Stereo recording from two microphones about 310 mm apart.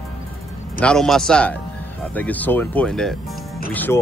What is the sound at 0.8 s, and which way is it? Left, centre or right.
Speech, centre.